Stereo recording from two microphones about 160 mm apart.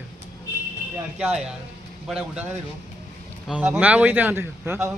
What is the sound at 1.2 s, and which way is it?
Speech, 5° right (ahead or behind).